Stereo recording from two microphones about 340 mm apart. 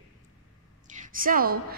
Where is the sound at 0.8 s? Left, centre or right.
Right.